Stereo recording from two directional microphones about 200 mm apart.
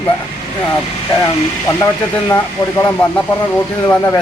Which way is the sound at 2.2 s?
15° left (ahead or behind).